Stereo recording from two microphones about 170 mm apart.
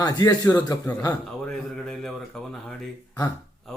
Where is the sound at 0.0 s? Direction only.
20° left (ahead or behind).